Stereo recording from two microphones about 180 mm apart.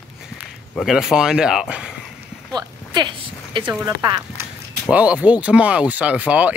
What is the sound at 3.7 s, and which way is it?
Speech, 20° right (ahead or behind).